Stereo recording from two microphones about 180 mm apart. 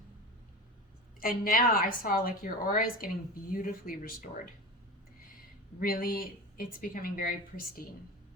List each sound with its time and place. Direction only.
1.2 s speech: 50° left (ahead or behind)
5.8 s speech: 55° left (ahead or behind)